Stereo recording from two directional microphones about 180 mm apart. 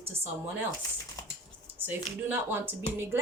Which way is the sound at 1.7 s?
10° right (ahead or behind).